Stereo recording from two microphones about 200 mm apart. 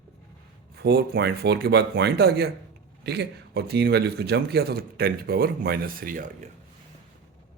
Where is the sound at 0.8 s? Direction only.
50° right (ahead or behind).